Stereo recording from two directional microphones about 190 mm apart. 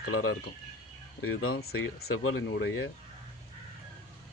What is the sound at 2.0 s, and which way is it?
Speech, 90° left.